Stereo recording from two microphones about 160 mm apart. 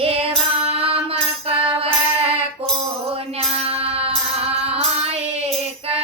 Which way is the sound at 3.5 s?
40° right (ahead or behind).